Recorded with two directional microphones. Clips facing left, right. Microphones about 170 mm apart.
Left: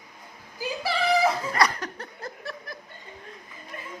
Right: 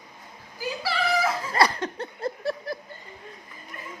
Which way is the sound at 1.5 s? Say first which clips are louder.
Right 2 dB; 30° right (ahead or behind).